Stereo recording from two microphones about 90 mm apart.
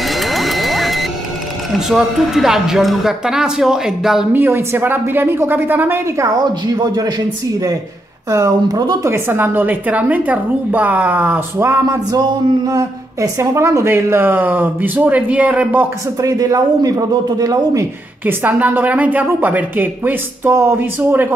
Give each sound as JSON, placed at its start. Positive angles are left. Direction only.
{"t": 0.1, "sound": "music", "side_deg": 0}
{"t": 1.7, "sound": "a woman's voice", "side_deg": -5}
{"t": 4.3, "sound": "speech", "side_deg": -25}
{"t": 6.3, "sound": "speech", "side_deg": -50}
{"t": 9.0, "sound": "speech", "side_deg": -30}
{"t": 11.5, "sound": "speech", "side_deg": -30}
{"t": 12.1, "sound": "speech", "side_deg": -50}
{"t": 16.2, "sound": "speech", "side_deg": -40}
{"t": 18.2, "sound": "speech", "side_deg": -20}